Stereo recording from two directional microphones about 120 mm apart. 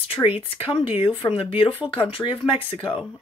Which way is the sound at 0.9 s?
45° left (ahead or behind).